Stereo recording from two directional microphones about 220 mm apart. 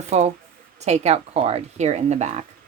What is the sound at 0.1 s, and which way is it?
Speech, 30° right (ahead or behind).